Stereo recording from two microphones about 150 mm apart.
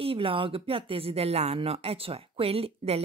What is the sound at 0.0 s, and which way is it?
Speech, 35° right (ahead or behind).